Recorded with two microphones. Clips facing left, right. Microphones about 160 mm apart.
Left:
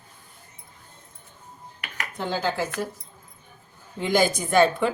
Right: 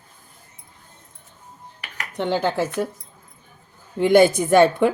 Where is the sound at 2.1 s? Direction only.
70° right (ahead or behind).